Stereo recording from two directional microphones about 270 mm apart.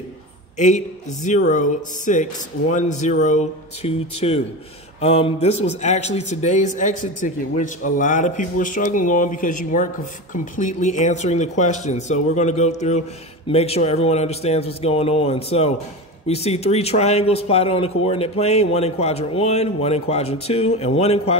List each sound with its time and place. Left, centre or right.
0.6 s a man's voice: left